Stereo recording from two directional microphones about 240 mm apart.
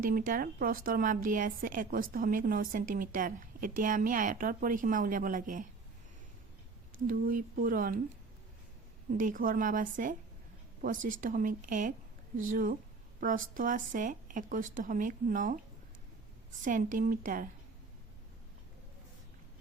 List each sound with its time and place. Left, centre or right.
0.0 s a woman's voice: right
7.1 s a woman's voice: right
9.1 s a woman's voice: right
16.6 s a woman's voice: right